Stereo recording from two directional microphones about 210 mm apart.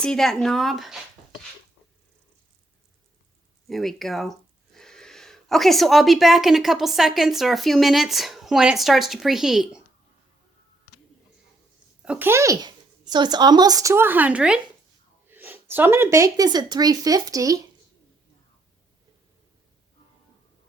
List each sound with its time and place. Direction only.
0.0 s speech: 5° left (ahead or behind)
3.7 s speech: centre (ahead or behind)
12.0 s speech: 5° right (ahead or behind)